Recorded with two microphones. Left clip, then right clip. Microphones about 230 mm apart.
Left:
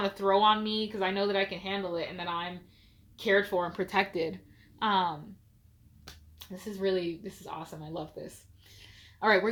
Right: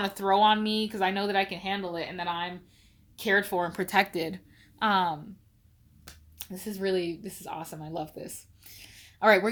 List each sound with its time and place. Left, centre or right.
0.0 s speech: right
6.4 s speech: right